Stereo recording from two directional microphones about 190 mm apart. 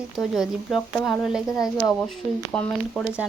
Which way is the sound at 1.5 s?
20° left (ahead or behind).